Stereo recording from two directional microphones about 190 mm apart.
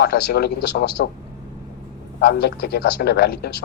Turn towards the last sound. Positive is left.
turn(degrees=55)  # may be behind; listen again after turning